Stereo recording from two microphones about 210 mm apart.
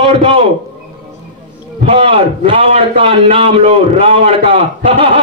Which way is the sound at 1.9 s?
25° right (ahead or behind).